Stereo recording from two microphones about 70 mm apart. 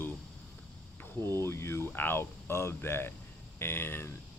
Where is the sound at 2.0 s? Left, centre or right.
Left.